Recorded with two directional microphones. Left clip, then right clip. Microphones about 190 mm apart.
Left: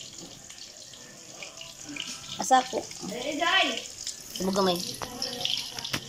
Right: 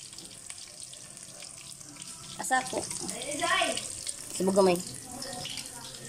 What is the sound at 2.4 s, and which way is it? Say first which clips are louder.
Water tap: left 6 dB; 5° left (ahead or behind).